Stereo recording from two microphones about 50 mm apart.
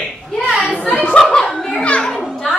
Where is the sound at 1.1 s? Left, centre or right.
Centre.